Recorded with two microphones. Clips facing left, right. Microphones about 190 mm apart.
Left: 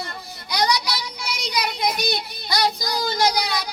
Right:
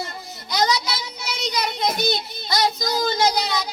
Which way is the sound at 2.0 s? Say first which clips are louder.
Right 2 dB; 20° right (ahead or behind).